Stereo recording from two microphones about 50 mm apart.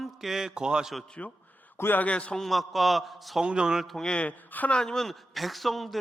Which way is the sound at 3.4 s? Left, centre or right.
Centre.